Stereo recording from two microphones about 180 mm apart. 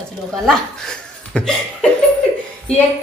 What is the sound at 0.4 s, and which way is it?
Speech, 5° left (ahead or behind).